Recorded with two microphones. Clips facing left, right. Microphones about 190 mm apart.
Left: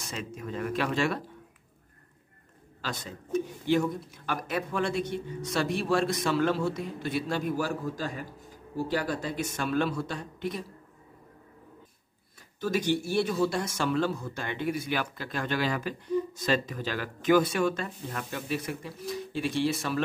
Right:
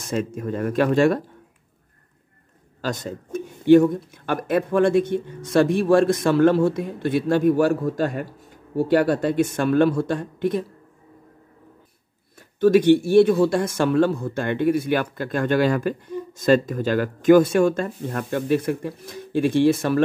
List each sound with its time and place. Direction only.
0.0 s speech: 45° right (ahead or behind)
2.8 s speech: 45° right (ahead or behind)
12.5 s speech: 60° right (ahead or behind)